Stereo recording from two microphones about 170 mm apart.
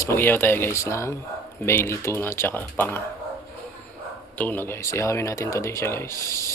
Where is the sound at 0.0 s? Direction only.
15° left (ahead or behind).